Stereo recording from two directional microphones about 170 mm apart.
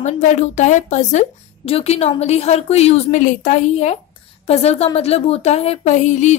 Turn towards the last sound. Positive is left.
turn(degrees=45)  # may be behind; listen again after turning